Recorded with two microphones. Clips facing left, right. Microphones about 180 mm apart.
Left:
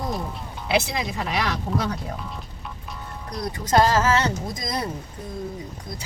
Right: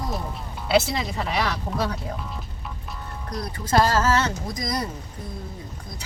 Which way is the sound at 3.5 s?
20° left (ahead or behind).